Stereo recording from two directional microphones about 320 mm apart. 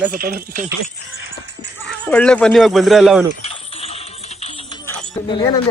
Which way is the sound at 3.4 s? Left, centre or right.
Centre.